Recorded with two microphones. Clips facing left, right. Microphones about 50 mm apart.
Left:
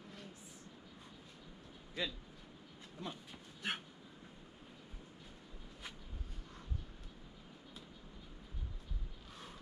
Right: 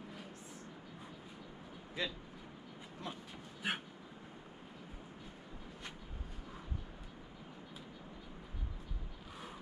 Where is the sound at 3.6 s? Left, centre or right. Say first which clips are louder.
Right 2 dB; centre.